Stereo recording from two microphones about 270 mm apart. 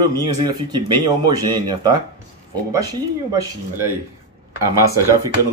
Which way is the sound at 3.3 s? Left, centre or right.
Centre.